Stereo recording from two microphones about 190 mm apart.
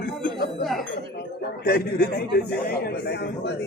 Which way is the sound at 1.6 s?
55° left (ahead or behind).